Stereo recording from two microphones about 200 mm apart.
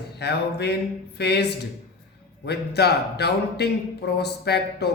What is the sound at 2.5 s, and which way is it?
A man's voice, 55° left (ahead or behind).